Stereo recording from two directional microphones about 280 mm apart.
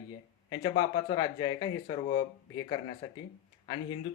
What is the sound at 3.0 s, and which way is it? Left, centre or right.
Speech, centre.